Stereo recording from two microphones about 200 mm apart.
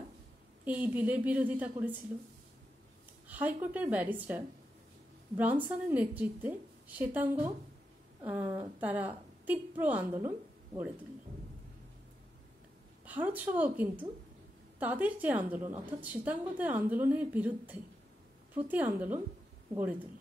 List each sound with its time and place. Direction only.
0.7 s a woman's voice: 10° right (ahead or behind)
3.3 s a woman's voice: 10° right (ahead or behind)
5.4 s a woman's voice: 10° right (ahead or behind)
13.0 s a woman's voice: 10° right (ahead or behind)